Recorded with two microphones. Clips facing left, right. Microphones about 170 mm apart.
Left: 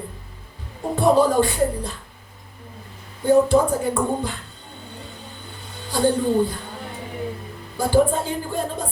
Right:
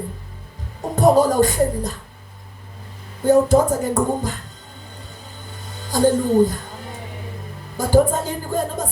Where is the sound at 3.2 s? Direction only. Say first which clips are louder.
Right 2 dB; 40° right (ahead or behind).